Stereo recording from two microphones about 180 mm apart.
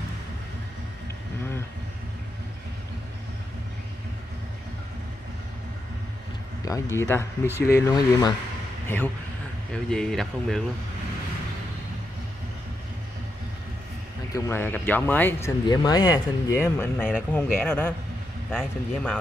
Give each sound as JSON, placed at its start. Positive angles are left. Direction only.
{"t": 6.6, "sound": "speech", "side_deg": 20}
{"t": 14.3, "sound": "speech", "side_deg": 10}
{"t": 15.6, "sound": "speech", "side_deg": 20}